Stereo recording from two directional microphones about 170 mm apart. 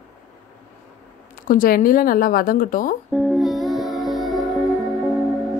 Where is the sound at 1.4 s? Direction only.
55° left (ahead or behind).